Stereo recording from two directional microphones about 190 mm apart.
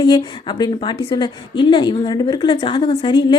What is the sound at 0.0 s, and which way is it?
Speech, 20° left (ahead or behind).